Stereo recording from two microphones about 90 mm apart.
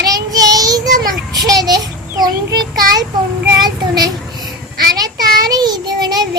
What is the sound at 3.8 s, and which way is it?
Child singing, 45° right (ahead or behind).